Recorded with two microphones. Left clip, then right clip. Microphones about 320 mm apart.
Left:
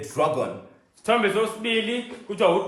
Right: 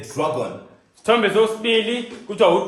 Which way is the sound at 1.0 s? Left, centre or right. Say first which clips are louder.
Right 5 dB; right.